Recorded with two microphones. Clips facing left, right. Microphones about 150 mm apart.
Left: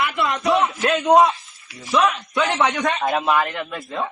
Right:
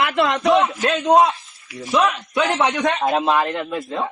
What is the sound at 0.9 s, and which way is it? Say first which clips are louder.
A man's voice: left 1 dB; centre (ahead or behind).